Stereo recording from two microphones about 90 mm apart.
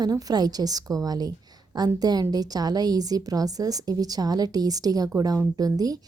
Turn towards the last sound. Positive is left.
turn(degrees=-45)  # may be behind; listen again after turning